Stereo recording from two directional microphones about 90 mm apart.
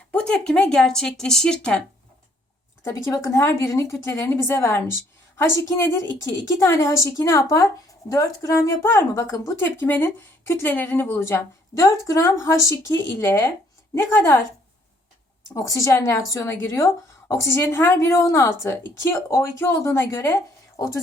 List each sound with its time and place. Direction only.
0.1 s speech: 10° left (ahead or behind)
2.8 s a woman's voice: 35° left (ahead or behind)
15.5 s a woman's voice: 35° left (ahead or behind)